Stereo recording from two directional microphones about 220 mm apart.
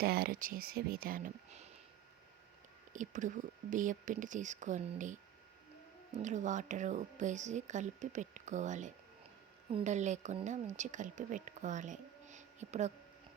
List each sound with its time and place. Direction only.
0.0 s speech: 45° right (ahead or behind)
2.9 s speech: 35° right (ahead or behind)
6.1 s speech: 35° right (ahead or behind)